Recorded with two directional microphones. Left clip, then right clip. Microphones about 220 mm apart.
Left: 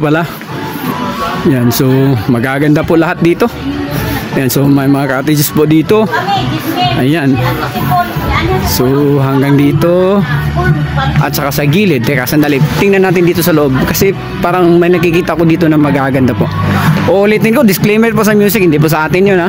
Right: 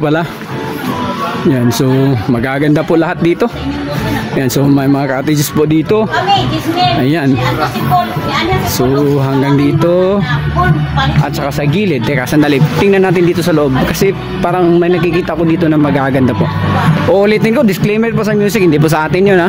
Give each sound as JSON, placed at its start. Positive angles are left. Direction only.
{"t": 2.6, "sound": "speech", "side_deg": 10}
{"t": 9.4, "sound": "speech", "side_deg": 10}
{"t": 11.6, "sound": "speech", "side_deg": 20}
{"t": 12.4, "sound": "speech", "side_deg": 0}
{"t": 18.5, "sound": "speech", "side_deg": 5}